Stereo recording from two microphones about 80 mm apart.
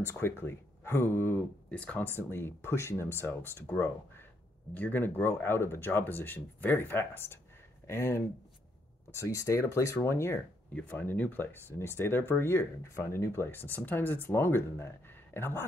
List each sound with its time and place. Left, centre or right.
0.0 s speech: left
1.7 s speech: centre
2.2 s speech: left
10.7 s speech: centre